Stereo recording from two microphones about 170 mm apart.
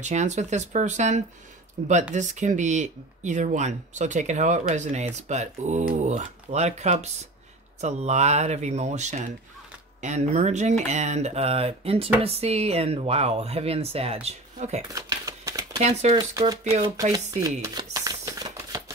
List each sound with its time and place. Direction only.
0.0 s speech: 45° right (ahead or behind)
14.9 s crumpling: 20° right (ahead or behind)
15.8 s speech: 40° right (ahead or behind)
16.2 s speech: 20° right (ahead or behind)
16.6 s speech: 40° right (ahead or behind)
17.1 s speech: 20° right (ahead or behind)
17.9 s typewriter: 20° right (ahead or behind)